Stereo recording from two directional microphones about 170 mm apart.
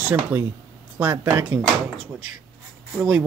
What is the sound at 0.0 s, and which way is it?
Speech, 10° right (ahead or behind).